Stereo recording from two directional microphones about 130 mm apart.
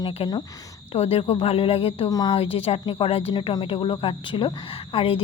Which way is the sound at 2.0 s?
30° left (ahead or behind).